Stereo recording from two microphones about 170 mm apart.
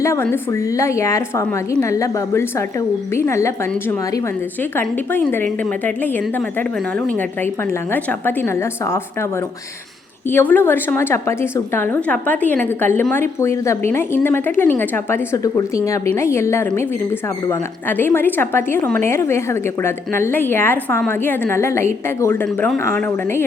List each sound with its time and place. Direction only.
0.0 s a woman's voice: 15° left (ahead or behind)
7.9 s a woman's voice: 10° left (ahead or behind)
10.2 s a woman's voice: 10° left (ahead or behind)